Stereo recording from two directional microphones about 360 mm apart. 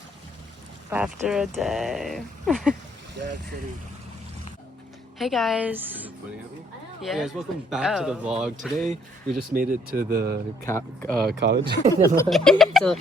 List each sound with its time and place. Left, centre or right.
0.9 s speech: centre
5.1 s speech: centre
9.4 s speech: right
10.7 s speech: centre
11.2 s speech: right
11.6 s speech: centre
12.1 s speech: centre